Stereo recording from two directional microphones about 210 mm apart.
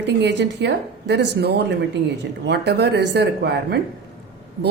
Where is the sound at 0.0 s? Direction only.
55° right (ahead or behind).